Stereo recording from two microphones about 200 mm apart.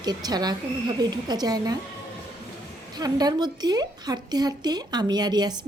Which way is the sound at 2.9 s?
20° right (ahead or behind).